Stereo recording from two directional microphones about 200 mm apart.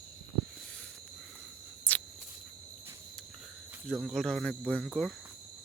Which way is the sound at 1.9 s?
10° left (ahead or behind).